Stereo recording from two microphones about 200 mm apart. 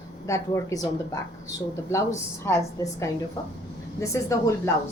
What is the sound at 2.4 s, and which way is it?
Speech, 15° left (ahead or behind).